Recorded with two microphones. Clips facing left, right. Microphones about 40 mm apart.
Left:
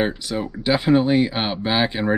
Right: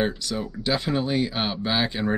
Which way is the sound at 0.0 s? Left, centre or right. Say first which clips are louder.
Left 3 dB; left.